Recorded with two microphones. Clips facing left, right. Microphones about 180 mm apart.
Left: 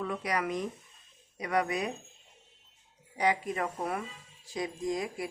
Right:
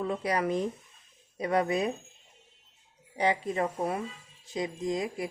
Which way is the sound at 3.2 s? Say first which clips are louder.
Right 2 dB; 25° right (ahead or behind).